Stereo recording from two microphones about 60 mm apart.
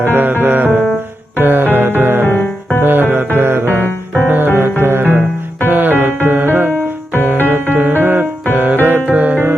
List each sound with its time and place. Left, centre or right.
0.1 s music: right
2.2 s music: left
2.8 s music: right
3.7 s music: left
4.8 s music: right